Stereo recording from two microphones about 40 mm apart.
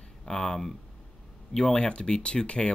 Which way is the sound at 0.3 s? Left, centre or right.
Centre.